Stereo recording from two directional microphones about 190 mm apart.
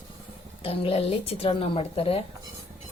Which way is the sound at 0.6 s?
30° left (ahead or behind).